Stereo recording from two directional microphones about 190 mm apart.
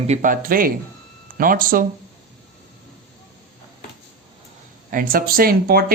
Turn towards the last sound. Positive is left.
turn(degrees=-50)  # may be behind; listen again after turning